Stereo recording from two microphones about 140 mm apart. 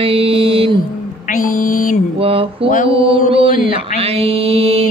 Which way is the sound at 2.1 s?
40° right (ahead or behind).